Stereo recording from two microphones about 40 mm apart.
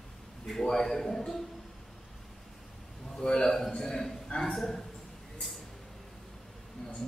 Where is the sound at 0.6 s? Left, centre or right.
Centre.